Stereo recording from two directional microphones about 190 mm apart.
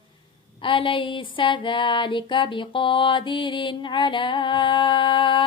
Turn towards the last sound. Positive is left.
turn(degrees=25)  # may be behind; listen again after turning